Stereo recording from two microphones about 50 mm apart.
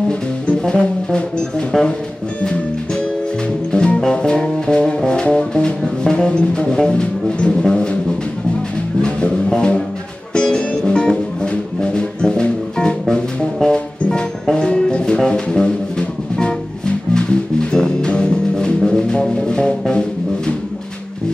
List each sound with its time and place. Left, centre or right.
0.5 s music: centre
1.7 s speech: centre
3.7 s music: centre
9.0 s music: centre